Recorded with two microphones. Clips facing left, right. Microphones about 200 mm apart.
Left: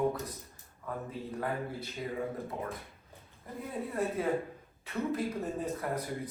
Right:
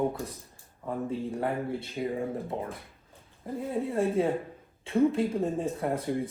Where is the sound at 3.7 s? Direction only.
25° right (ahead or behind).